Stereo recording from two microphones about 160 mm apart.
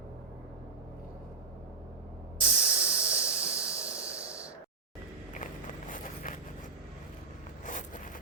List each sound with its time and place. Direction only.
2.4 s hiss: 5° right (ahead or behind)
3.6 s snort: 5° right (ahead or behind)
7.6 s a sound: 55° left (ahead or behind)